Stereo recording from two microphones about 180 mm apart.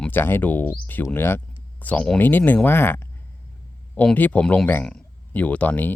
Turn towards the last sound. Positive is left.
turn(degrees=10)  # may be behind; listen again after turning